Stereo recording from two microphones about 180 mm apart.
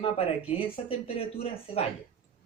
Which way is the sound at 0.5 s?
30° left (ahead or behind).